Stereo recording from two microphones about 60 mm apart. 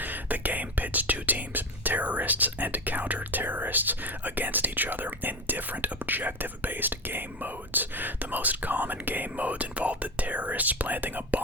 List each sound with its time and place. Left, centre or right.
0.0 s whispering: right